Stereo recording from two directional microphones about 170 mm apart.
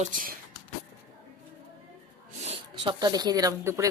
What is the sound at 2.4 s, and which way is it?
Speech, 35° right (ahead or behind).